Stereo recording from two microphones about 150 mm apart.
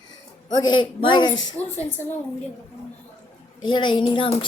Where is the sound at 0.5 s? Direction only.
30° left (ahead or behind).